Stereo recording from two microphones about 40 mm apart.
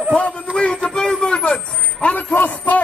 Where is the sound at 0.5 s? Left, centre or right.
Left.